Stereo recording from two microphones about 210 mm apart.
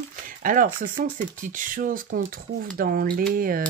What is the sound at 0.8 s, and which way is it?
Speech, 40° right (ahead or behind).